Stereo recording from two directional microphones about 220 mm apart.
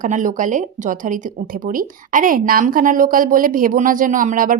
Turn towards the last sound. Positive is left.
turn(degrees=-40)  # may be behind; listen again after turning